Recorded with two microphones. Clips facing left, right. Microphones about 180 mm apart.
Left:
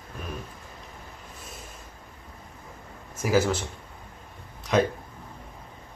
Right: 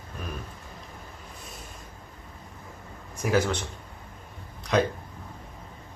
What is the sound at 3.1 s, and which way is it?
Speech, 5° left (ahead or behind).